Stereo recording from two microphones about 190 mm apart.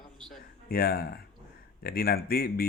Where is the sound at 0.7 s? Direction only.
55° left (ahead or behind).